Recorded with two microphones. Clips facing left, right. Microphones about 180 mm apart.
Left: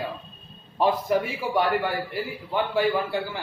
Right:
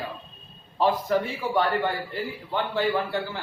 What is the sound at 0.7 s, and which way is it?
Speech, 15° left (ahead or behind).